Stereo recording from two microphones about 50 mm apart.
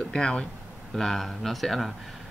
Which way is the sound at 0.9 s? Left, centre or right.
Centre.